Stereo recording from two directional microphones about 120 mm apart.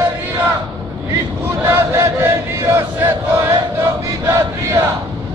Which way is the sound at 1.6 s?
20° right (ahead or behind).